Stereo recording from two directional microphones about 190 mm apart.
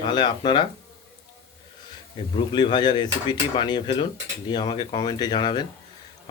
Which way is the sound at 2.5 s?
25° left (ahead or behind).